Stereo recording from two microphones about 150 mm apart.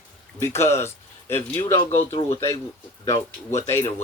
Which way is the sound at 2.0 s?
45° left (ahead or behind).